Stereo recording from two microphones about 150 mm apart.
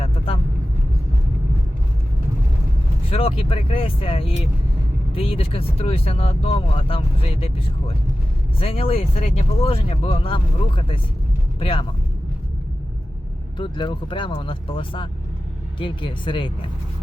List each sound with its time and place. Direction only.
3.1 s speech: 40° left (ahead or behind)
13.6 s speech: 35° left (ahead or behind)